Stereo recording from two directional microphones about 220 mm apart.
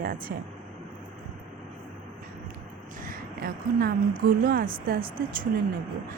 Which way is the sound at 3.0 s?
40° right (ahead or behind).